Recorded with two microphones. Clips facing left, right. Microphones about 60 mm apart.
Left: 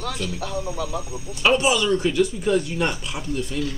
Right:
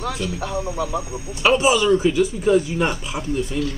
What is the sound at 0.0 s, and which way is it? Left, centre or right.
Speech, right.